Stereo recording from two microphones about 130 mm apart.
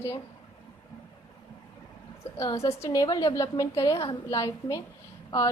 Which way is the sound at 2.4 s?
25° left (ahead or behind).